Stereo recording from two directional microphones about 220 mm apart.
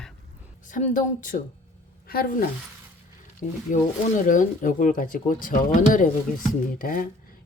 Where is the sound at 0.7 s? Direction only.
35° left (ahead or behind).